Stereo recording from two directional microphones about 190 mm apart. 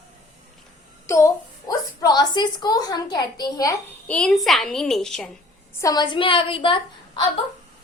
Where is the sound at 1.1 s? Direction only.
15° left (ahead or behind).